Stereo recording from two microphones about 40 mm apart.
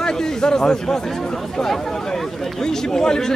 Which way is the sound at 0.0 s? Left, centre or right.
Centre.